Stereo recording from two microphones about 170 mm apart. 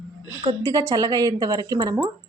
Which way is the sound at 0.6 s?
20° right (ahead or behind).